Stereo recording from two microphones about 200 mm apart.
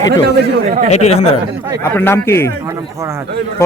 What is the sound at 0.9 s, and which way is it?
Speech, 35° left (ahead or behind).